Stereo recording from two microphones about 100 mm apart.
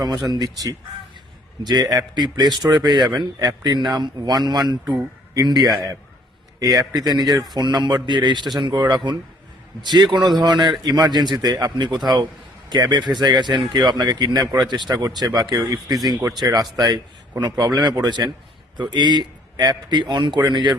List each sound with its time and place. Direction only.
0.0 s a man's voice: 40° right (ahead or behind)
6.6 s a man's voice: 40° right (ahead or behind)